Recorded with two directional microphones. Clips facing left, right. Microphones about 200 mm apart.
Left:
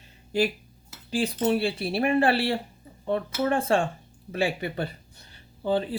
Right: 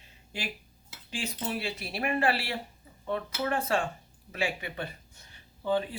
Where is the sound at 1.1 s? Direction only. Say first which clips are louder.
Left 10 dB; 35° left (ahead or behind).